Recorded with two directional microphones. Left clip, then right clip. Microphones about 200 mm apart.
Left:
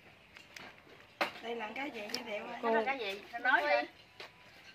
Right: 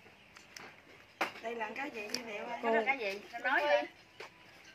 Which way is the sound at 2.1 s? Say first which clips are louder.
Even; centre (ahead or behind).